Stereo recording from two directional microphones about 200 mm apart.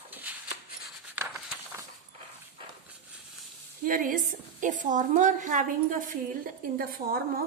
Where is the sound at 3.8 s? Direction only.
45° right (ahead or behind).